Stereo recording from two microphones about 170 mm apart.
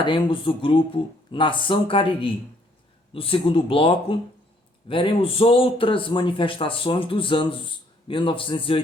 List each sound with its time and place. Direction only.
0.0 s speech: 30° left (ahead or behind)